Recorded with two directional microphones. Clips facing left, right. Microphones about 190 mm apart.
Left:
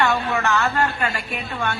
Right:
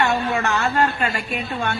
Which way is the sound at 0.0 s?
35° right (ahead or behind).